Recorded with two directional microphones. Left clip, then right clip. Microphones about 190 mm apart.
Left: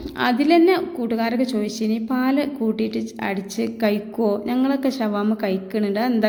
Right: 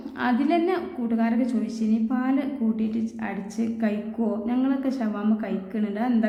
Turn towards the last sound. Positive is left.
turn(degrees=40)  # may be behind; listen again after turning